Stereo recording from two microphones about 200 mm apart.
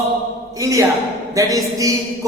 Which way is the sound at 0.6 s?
15° right (ahead or behind).